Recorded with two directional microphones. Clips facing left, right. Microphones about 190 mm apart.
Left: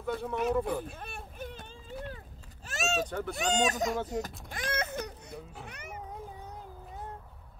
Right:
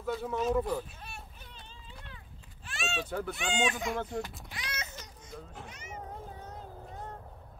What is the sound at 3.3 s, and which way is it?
Speech, 40° left (ahead or behind).